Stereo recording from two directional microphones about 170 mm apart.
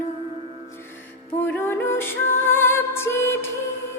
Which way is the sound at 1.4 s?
15° left (ahead or behind).